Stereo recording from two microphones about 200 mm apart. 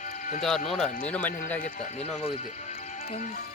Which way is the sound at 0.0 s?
40° left (ahead or behind).